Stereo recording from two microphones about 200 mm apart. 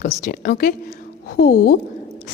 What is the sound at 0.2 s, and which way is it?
A woman's voice, 50° left (ahead or behind).